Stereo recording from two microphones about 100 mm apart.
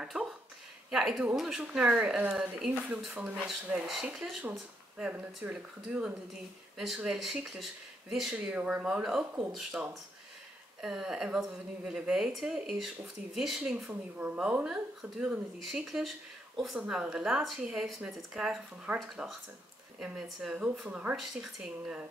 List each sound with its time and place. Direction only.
0.0 s a woman's voice: 5° right (ahead or behind)